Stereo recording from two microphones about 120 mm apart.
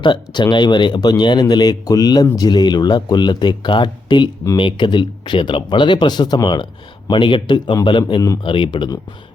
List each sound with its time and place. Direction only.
0.0 s a man's voice: 40° left (ahead or behind)